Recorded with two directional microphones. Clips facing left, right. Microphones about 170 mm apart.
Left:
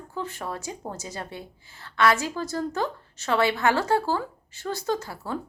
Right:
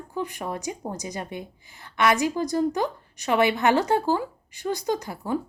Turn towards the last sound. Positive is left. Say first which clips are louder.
# right 2 dB
turn(degrees=-15)  # may be behind; listen again after turning